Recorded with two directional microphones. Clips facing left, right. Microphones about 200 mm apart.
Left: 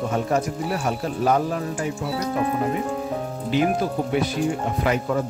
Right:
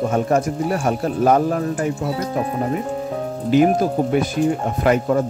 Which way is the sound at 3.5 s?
45° right (ahead or behind).